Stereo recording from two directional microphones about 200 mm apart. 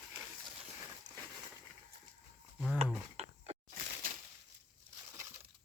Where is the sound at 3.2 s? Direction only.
30° right (ahead or behind).